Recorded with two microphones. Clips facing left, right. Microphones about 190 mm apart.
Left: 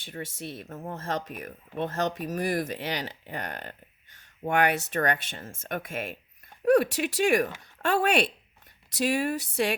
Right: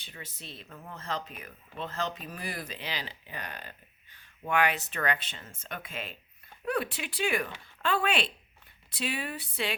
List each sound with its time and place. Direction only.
0.0 s speech: 50° left (ahead or behind)